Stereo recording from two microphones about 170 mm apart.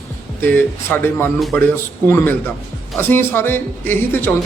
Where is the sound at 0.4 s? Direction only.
10° left (ahead or behind).